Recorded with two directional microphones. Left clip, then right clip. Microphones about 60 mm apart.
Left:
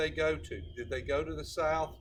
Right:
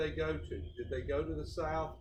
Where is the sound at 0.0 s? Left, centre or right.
Left.